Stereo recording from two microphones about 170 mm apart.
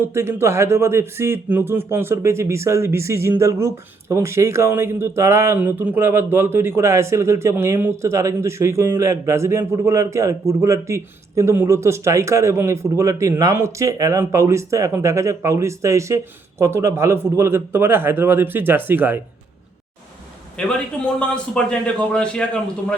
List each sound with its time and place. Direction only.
0.0 s speech: 15° right (ahead or behind)
20.6 s a man's voice: 5° left (ahead or behind)